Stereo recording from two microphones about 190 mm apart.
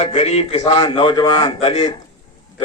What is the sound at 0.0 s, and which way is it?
A man's voice, 35° left (ahead or behind).